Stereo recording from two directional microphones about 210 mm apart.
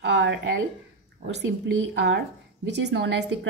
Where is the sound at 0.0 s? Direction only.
55° right (ahead or behind).